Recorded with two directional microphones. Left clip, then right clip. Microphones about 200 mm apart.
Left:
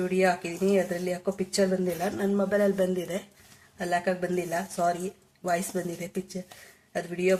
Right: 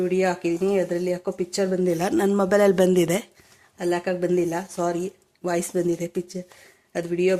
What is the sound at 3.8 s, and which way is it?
Speech, 45° right (ahead or behind).